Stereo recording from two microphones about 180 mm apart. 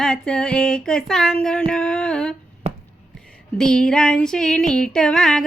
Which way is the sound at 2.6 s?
35° right (ahead or behind).